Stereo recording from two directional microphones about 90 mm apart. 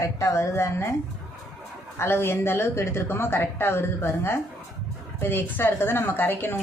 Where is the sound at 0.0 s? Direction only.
35° left (ahead or behind).